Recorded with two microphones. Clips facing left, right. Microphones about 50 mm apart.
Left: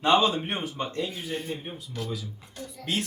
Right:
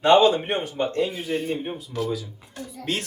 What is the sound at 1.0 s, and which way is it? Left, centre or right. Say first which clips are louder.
Speech: right 7 dB; right.